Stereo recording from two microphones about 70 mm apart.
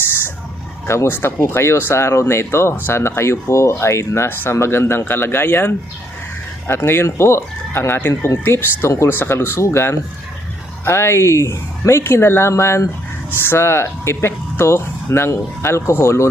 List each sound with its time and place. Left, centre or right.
0.9 s speech: left